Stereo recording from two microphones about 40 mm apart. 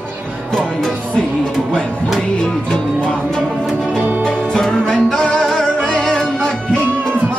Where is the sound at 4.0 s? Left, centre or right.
Right.